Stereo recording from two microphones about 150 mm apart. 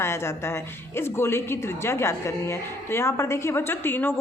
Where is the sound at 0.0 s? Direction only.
15° left (ahead or behind).